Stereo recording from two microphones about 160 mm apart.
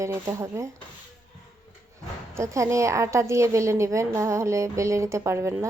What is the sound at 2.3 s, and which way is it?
A woman's voice, 20° right (ahead or behind).